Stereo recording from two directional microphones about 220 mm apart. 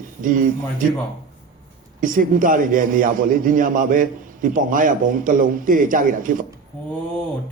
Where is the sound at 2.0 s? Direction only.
40° right (ahead or behind).